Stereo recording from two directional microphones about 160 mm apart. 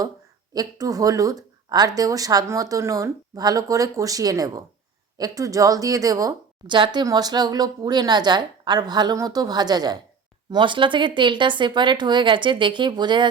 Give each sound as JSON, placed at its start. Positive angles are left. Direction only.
{"t": 0.5, "sound": "a woman's voice", "side_deg": -20}